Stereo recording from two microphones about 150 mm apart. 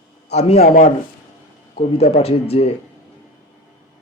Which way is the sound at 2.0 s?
45° left (ahead or behind).